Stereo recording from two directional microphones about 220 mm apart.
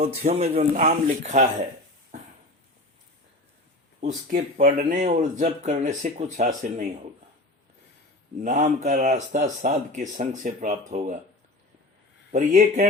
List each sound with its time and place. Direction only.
0.0 s speech: 30° right (ahead or behind)
4.0 s speech: 40° right (ahead or behind)
8.4 s speech: 35° right (ahead or behind)
12.3 s speech: 35° right (ahead or behind)